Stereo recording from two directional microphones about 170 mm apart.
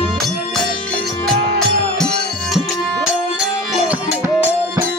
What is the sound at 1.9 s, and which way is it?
Music, 5° left (ahead or behind).